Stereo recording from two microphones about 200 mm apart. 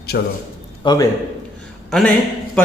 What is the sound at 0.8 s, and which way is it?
Speech, 25° left (ahead or behind).